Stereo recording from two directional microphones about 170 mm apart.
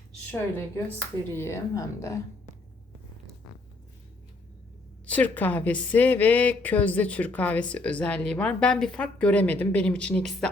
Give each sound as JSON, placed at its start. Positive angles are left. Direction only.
{"t": 1.3, "sound": "a woman's voice", "side_deg": 15}
{"t": 5.0, "sound": "a woman's voice", "side_deg": 10}